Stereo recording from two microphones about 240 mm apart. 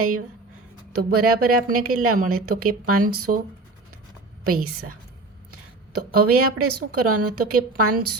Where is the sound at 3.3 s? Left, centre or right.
Right.